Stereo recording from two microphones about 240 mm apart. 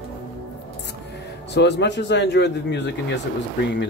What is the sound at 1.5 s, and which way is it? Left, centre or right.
Speech, left.